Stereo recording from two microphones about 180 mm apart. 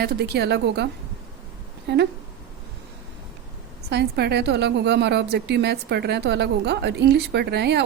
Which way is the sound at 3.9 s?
65° right (ahead or behind).